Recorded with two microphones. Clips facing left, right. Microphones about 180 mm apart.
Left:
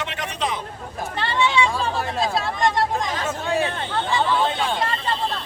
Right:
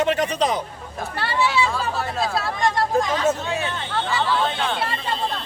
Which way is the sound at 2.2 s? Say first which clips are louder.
Left 1 dB; 20° left (ahead or behind).